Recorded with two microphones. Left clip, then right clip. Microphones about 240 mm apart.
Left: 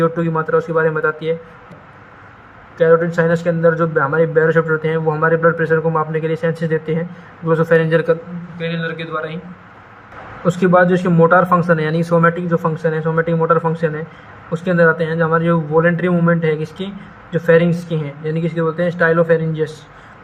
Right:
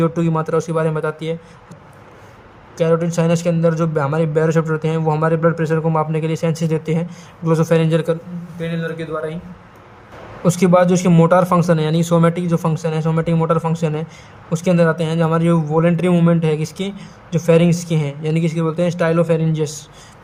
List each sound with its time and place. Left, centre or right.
0.0 s a man's voice: right
2.7 s a man's voice: right
10.4 s a man's voice: right